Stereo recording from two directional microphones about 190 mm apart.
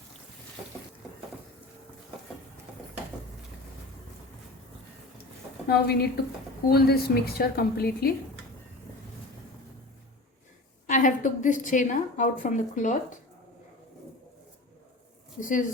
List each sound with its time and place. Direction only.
5.6 s a woman's voice: 55° left (ahead or behind)
10.8 s a woman's voice: 40° left (ahead or behind)
15.4 s speech: 45° left (ahead or behind)